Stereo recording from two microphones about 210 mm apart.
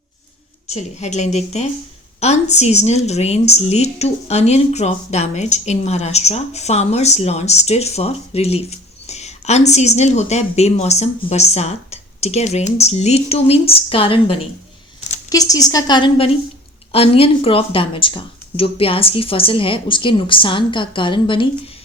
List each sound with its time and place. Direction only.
0.7 s a woman's voice: 30° left (ahead or behind)